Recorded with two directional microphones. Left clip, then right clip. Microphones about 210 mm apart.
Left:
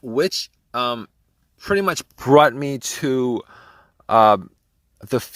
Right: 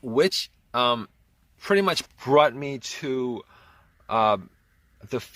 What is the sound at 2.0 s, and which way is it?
Speech, 35° left (ahead or behind).